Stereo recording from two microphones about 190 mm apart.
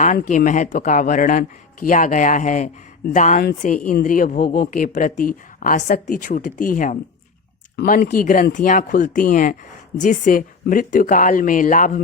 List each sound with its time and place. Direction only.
0.0 s speech: 40° left (ahead or behind)